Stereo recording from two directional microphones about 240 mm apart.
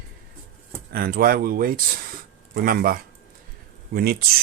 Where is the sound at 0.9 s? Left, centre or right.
Right.